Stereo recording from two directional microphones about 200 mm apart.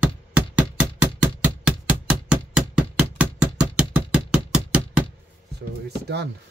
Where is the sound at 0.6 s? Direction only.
5° right (ahead or behind).